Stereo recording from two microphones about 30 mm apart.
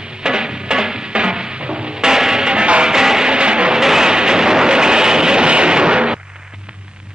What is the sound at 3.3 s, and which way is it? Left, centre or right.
Music, right.